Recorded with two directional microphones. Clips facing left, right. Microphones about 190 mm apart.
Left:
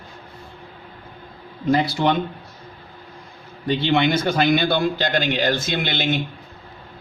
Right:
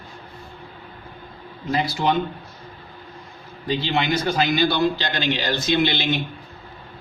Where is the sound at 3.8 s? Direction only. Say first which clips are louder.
Left 5 dB; 60° left (ahead or behind).